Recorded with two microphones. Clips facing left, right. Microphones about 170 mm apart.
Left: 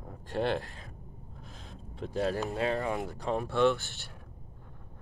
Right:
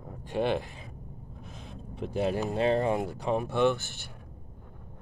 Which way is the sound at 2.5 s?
25° right (ahead or behind).